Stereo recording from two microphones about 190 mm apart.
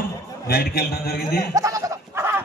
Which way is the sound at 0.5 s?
55° left (ahead or behind).